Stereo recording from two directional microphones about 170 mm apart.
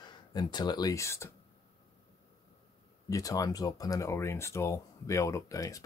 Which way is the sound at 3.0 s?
20° left (ahead or behind).